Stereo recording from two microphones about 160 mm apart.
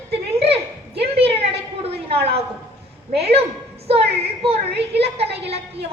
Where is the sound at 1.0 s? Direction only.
40° right (ahead or behind).